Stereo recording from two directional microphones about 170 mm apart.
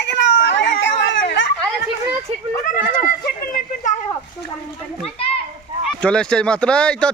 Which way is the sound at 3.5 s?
45° left (ahead or behind).